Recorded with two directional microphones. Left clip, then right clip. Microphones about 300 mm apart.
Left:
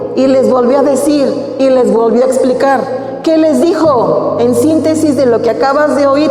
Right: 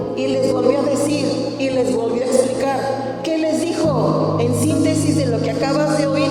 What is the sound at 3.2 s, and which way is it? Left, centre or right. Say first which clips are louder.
Music: left 12 dB; left.